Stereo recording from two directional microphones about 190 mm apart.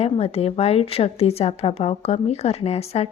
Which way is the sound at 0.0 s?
30° left (ahead or behind).